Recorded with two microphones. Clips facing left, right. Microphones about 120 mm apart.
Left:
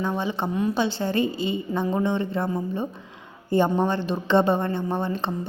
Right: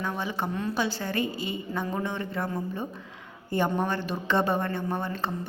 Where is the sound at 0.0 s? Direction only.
25° left (ahead or behind).